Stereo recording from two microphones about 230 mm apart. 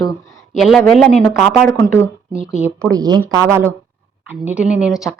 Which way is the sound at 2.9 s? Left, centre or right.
Centre.